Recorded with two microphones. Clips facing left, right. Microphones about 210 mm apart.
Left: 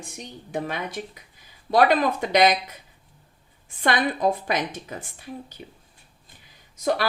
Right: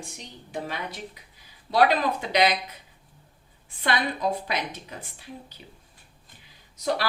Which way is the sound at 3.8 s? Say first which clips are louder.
Left 4 dB; 45° left (ahead or behind).